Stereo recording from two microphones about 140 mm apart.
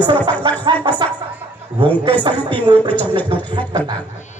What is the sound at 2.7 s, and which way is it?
Speech, 35° right (ahead or behind).